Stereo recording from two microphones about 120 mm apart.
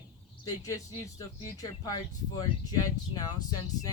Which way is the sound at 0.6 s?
30° left (ahead or behind).